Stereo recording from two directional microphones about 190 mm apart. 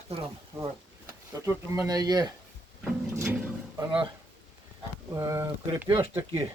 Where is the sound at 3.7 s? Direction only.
25° right (ahead or behind).